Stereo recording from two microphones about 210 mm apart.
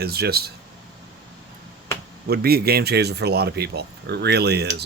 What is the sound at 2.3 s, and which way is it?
Speech, 45° right (ahead or behind).